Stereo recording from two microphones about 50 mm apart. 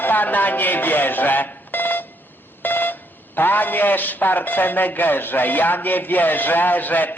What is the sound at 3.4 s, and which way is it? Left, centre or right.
Music, left.